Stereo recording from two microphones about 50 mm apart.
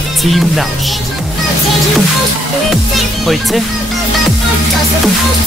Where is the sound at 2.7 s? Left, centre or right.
Centre.